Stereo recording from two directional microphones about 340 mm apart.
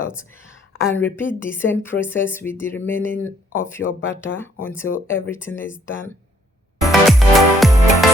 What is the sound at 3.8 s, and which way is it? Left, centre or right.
Speech, left.